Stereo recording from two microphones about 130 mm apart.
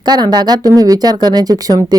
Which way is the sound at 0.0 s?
30° right (ahead or behind).